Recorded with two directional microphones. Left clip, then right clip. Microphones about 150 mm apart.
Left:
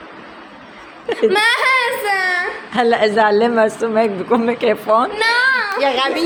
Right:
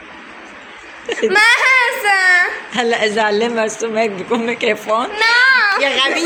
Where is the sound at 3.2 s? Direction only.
5° left (ahead or behind).